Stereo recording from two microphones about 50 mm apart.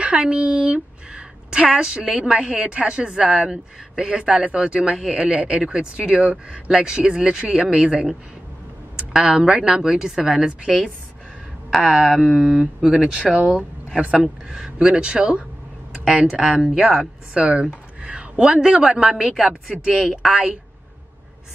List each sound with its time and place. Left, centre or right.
0.0 s a woman's voice: right
1.5 s a woman's voice: centre
12.0 s a woman's voice: centre
15.9 s a sound: centre
16.3 s speech: centre
19.2 s speech: centre
19.7 s a woman's voice: right
20.2 s speech: centre